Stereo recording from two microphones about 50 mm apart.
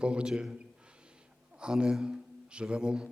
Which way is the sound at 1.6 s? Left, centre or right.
Centre.